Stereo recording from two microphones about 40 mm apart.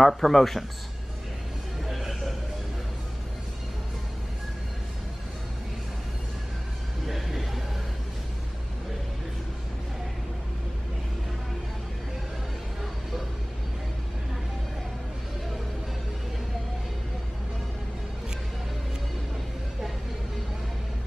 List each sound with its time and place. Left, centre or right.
0.0 s speech: centre
1.9 s a sound: centre
7.1 s vehicle: centre